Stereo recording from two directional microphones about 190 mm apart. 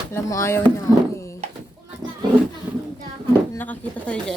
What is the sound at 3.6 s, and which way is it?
Speech, 5° left (ahead or behind).